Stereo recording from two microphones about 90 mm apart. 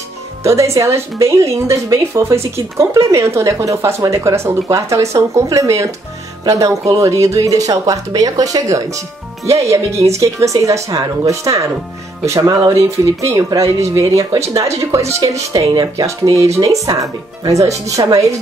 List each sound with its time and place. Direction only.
0.4 s speech: 35° right (ahead or behind)
15.7 s speech: 50° right (ahead or behind)
16.1 s speech: 35° right (ahead or behind)